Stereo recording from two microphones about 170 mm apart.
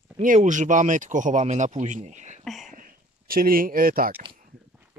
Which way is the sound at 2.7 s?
55° right (ahead or behind).